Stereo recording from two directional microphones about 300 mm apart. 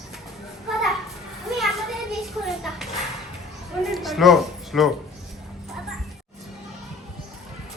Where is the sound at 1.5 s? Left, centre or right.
Centre.